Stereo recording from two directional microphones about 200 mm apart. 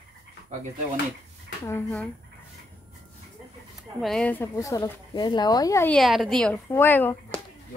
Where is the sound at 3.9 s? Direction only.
Centre (ahead or behind).